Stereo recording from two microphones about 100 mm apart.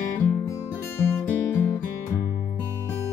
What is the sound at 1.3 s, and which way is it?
Music, 20° left (ahead or behind).